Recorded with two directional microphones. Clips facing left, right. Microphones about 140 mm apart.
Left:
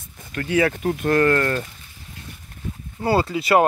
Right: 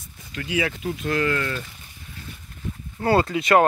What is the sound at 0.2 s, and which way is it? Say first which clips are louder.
Speech: left 6 dB; 55° left (ahead or behind).